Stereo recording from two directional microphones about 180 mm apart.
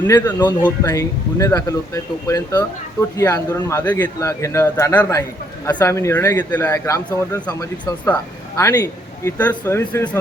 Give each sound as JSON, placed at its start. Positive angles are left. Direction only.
{"t": 0.1, "sound": "a man's voice", "side_deg": 15}